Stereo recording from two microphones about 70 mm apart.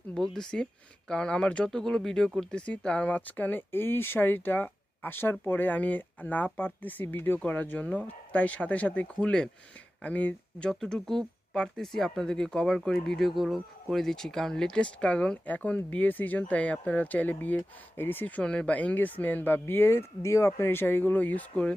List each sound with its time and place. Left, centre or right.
0.1 s speech: centre
10.0 s speech: left
10.7 s speech: centre